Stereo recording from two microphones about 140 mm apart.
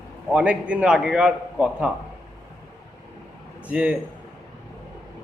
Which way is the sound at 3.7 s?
10° right (ahead or behind).